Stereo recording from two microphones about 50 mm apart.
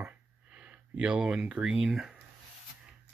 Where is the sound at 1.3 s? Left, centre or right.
Centre.